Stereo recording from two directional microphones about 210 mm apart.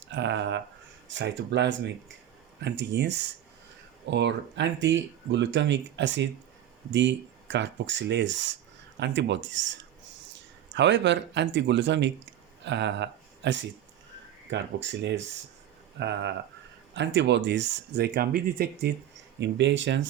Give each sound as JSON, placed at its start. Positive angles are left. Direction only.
{"t": 0.1, "sound": "speech", "side_deg": -55}
{"t": 19.4, "sound": "speech", "side_deg": -55}